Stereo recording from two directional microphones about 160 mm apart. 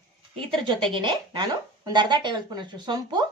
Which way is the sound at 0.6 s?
30° right (ahead or behind).